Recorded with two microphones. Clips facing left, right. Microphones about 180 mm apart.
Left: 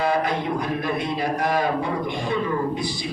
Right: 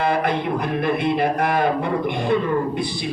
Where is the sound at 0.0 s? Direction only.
60° right (ahead or behind).